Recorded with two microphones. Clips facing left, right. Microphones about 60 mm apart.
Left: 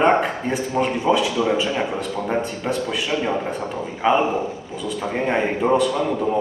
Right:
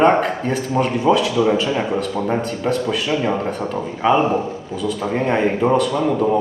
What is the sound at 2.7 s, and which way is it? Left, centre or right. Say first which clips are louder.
A man's voice: right 4 dB; centre.